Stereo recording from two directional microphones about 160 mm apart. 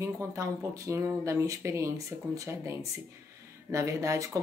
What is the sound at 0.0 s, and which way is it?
Speech, 20° right (ahead or behind).